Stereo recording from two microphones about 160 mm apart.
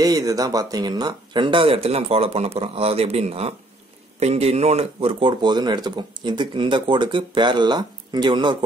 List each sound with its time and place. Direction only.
0.0 s speech: 20° right (ahead or behind)